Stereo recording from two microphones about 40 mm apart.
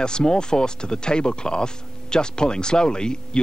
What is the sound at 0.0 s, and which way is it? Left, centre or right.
Speech, centre.